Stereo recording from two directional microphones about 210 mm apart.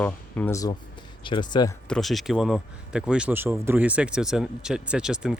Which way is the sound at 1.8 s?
Centre (ahead or behind).